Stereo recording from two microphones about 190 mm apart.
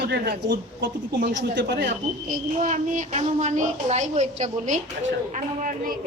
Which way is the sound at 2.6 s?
40° right (ahead or behind).